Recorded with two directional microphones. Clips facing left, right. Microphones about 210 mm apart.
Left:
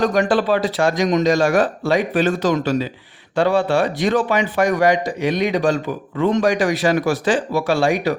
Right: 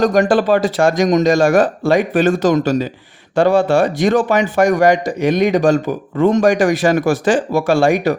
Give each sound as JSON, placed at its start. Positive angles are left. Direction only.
{"t": 0.0, "sound": "a man's voice", "side_deg": -45}